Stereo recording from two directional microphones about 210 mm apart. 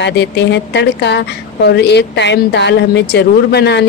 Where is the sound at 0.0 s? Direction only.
55° left (ahead or behind).